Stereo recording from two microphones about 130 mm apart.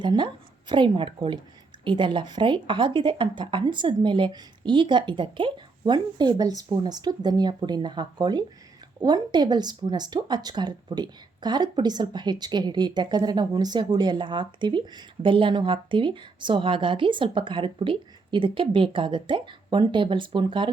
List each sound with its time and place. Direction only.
0.0 s speech: 35° right (ahead or behind)